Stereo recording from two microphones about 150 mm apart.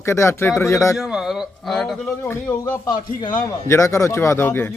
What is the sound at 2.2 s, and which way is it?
A man's voice, 15° left (ahead or behind).